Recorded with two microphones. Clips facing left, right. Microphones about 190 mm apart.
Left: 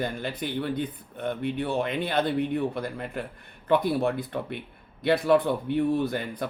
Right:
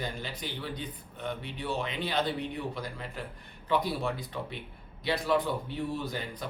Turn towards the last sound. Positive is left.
turn(degrees=55)  # may be behind; listen again after turning